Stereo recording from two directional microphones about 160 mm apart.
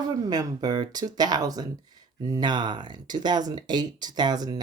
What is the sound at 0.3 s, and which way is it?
Speech, 25° right (ahead or behind).